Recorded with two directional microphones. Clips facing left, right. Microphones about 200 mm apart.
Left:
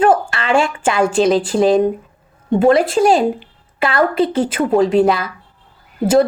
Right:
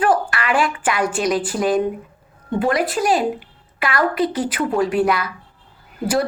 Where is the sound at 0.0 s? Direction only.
25° left (ahead or behind).